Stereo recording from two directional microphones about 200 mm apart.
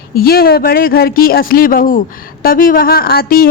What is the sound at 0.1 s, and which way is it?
Speech, 50° left (ahead or behind).